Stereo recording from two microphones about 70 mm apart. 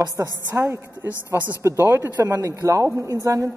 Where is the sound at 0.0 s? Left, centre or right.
Right.